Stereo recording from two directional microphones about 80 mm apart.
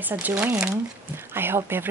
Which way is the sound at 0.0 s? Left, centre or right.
Right.